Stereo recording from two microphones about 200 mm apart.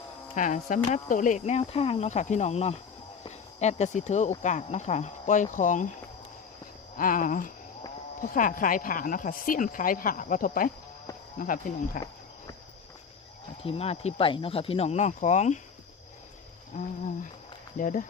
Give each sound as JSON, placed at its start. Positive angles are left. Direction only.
{"t": 0.3, "sound": "speech", "side_deg": 40}
{"t": 6.9, "sound": "speech", "side_deg": 45}
{"t": 13.6, "sound": "speech", "side_deg": 30}
{"t": 16.7, "sound": "speech", "side_deg": 35}